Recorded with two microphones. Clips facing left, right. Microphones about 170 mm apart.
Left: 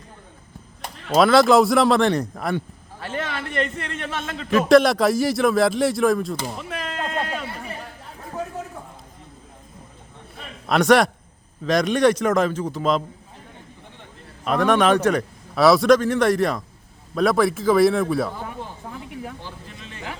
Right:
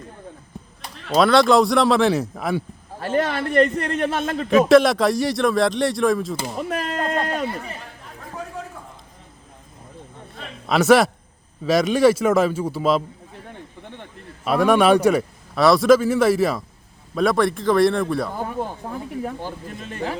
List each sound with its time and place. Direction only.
1.1 s speech: centre (ahead or behind)
3.0 s a man's voice: 40° right (ahead or behind)
4.4 s speech: centre (ahead or behind)
6.6 s a sound: 45° right (ahead or behind)
10.7 s a man's voice: 5° right (ahead or behind)
14.4 s a man's voice: 10° right (ahead or behind)
15.5 s speech: centre (ahead or behind)
18.3 s speech: 45° right (ahead or behind)